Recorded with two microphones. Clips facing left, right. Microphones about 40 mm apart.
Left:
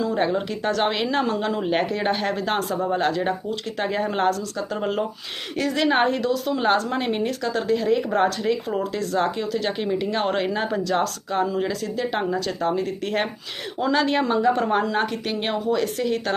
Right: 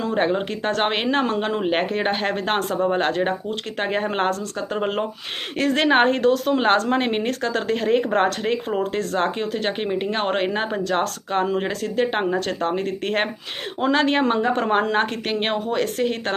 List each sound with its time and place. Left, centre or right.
0.0 s a woman's voice: right